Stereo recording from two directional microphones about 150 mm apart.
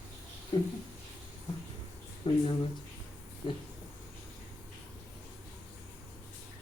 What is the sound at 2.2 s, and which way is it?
Speech, 40° left (ahead or behind).